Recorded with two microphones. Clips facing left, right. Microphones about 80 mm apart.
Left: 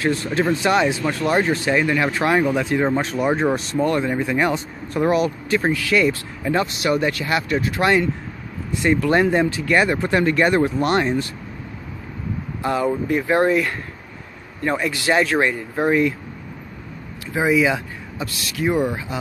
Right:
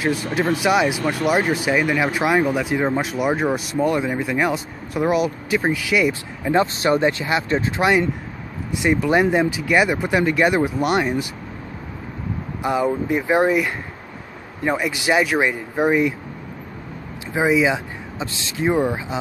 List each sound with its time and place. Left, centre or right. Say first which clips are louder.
0.0 s speech: left 1 dB; centre
6.6 s speech: right 3 dB; right; by 11.2 s centre
12.6 s speech: even; centre
17.3 s speech: even; right